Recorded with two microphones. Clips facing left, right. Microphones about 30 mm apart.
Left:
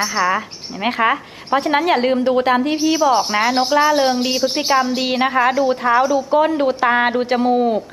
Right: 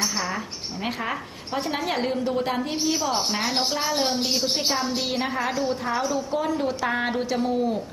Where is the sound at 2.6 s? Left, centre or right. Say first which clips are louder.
Left 8 dB; left.